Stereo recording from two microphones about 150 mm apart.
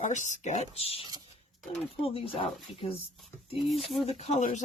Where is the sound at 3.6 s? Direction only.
Centre (ahead or behind).